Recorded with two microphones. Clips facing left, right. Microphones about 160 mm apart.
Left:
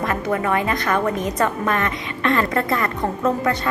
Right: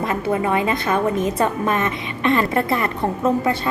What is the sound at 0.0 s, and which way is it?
A woman's voice, 20° right (ahead or behind).